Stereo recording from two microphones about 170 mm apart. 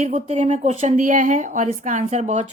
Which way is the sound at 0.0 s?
40° right (ahead or behind).